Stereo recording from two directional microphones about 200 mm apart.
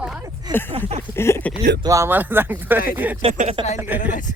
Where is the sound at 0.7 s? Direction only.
25° right (ahead or behind).